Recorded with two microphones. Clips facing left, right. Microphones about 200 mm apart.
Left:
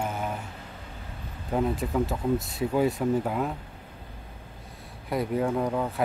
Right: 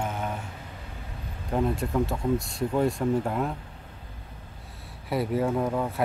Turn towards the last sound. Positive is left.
turn(degrees=0)  # may be behind; listen again after turning